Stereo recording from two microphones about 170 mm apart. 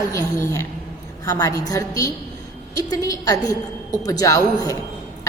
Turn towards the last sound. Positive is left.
turn(degrees=20)  # may be behind; listen again after turning